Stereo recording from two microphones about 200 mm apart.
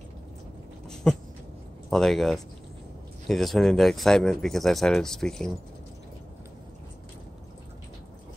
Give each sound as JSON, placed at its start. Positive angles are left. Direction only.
{"t": 1.0, "sound": "speech", "side_deg": 5}